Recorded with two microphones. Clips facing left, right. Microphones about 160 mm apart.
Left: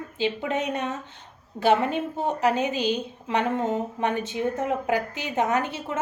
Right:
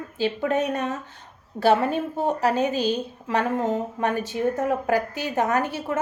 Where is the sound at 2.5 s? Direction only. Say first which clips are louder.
Even; 20° left (ahead or behind).